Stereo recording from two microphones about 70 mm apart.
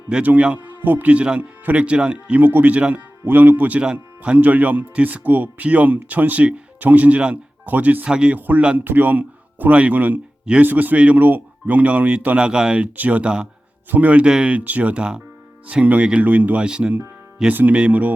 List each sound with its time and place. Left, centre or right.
0.1 s speech: centre
8.4 s speech: right
17.5 s speech: right